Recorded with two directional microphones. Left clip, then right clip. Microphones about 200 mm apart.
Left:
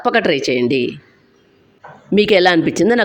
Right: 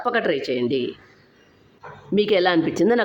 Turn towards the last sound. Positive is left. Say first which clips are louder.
# left 5 dB
turn(degrees=20)  # may be behind; listen again after turning